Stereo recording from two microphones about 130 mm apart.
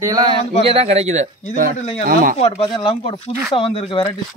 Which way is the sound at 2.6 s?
45° left (ahead or behind).